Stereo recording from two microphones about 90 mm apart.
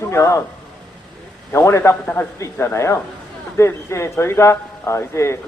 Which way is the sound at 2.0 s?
20° left (ahead or behind).